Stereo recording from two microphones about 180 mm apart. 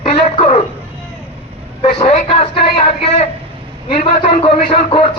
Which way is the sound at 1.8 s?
35° left (ahead or behind).